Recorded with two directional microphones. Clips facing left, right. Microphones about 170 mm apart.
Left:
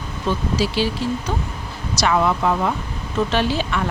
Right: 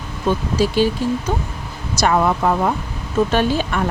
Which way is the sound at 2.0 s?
45° right (ahead or behind).